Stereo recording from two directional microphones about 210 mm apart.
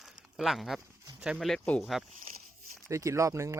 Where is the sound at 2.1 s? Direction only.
35° right (ahead or behind).